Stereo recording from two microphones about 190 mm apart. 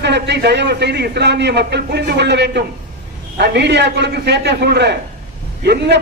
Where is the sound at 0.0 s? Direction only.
65° right (ahead or behind).